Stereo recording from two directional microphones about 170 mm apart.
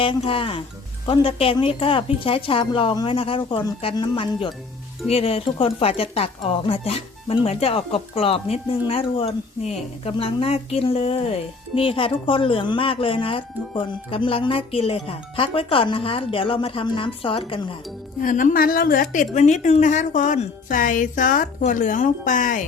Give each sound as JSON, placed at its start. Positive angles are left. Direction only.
{"t": 0.0, "sound": "speech", "side_deg": 30}
{"t": 18.2, "sound": "a woman's voice", "side_deg": 50}